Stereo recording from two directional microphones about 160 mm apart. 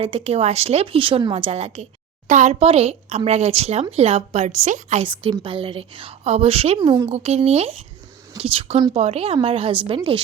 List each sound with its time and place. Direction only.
0.0 s a woman's voice: 35° right (ahead or behind)
5.0 s a woman's voice: 30° right (ahead or behind)